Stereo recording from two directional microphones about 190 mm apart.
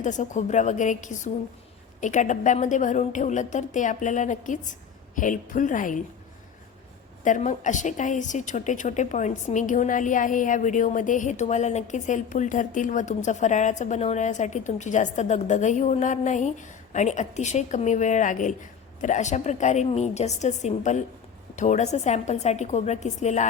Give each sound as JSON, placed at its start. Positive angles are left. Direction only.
{"t": 0.0, "sound": "a woman's voice", "side_deg": 40}
{"t": 7.3, "sound": "a woman's voice", "side_deg": 40}